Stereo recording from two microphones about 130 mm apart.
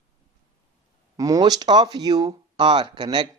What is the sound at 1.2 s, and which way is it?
Speech, 25° right (ahead or behind).